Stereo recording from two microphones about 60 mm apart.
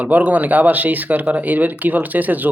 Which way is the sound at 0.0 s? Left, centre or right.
Right.